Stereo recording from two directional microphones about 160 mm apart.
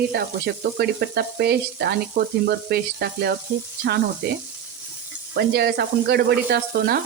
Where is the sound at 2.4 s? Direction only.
80° right.